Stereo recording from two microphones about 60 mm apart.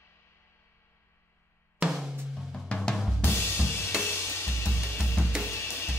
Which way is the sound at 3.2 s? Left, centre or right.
Left.